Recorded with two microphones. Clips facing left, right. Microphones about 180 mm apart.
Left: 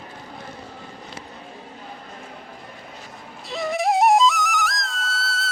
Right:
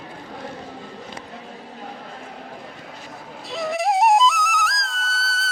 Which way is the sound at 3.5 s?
Centre (ahead or behind).